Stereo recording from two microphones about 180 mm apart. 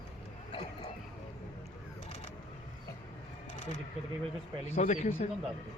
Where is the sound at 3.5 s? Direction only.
40° left (ahead or behind).